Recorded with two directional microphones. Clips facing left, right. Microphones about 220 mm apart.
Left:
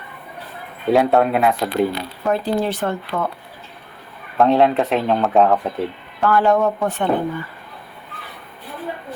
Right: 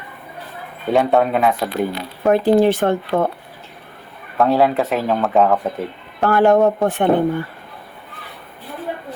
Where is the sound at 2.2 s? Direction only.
55° right (ahead or behind).